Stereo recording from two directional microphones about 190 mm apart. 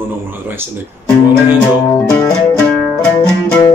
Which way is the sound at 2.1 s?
5° left (ahead or behind).